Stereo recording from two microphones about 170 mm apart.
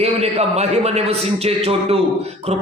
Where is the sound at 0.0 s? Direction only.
40° right (ahead or behind).